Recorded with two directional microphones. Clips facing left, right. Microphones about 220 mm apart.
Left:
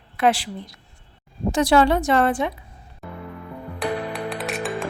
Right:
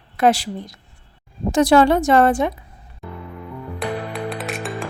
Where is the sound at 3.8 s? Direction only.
Centre (ahead or behind).